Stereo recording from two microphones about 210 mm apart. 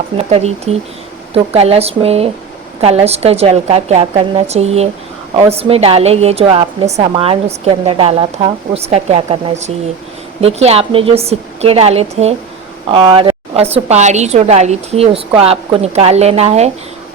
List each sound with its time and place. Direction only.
0.2 s a woman's voice: 30° right (ahead or behind)